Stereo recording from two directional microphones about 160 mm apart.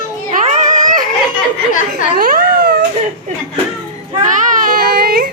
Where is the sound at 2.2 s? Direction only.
65° right (ahead or behind).